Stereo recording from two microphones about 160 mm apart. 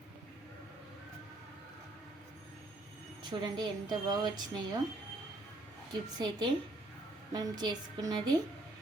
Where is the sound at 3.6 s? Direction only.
25° right (ahead or behind).